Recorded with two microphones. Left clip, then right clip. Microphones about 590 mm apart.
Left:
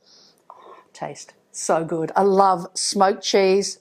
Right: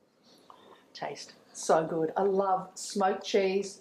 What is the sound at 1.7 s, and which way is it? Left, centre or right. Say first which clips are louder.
A woman's voice: left 5 dB; left.